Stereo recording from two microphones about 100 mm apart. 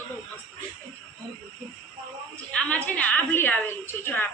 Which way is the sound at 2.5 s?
10° left (ahead or behind).